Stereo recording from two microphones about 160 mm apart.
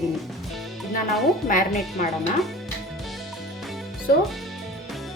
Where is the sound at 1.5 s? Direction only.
55° left (ahead or behind).